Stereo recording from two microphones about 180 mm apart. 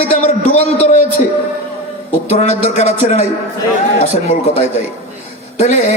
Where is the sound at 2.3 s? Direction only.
40° left (ahead or behind).